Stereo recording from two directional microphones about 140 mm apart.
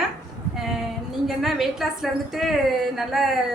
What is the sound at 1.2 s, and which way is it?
A woman's voice, centre (ahead or behind).